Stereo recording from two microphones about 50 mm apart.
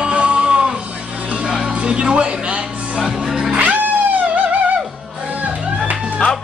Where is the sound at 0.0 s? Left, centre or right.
Right.